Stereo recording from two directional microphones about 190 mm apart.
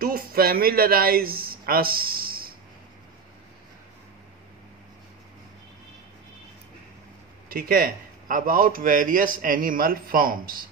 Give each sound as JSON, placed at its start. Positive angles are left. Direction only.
{"t": 0.0, "sound": "speech", "side_deg": -50}
{"t": 7.4, "sound": "a man's voice", "side_deg": -50}